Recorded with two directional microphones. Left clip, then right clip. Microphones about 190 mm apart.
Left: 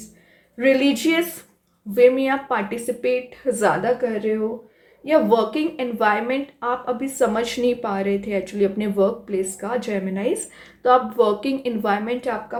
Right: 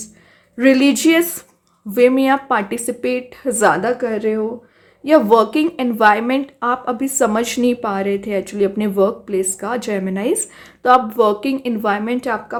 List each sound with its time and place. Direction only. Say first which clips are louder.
0.5 s a woman's voice: right 4 dB; 45° right (ahead or behind)